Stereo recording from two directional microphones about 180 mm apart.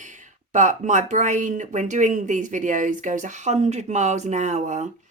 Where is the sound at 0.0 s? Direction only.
45° right (ahead or behind).